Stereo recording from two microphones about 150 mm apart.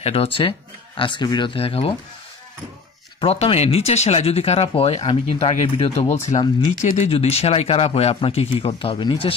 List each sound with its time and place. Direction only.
0.0 s speech: 40° left (ahead or behind)
3.2 s speech: 40° left (ahead or behind)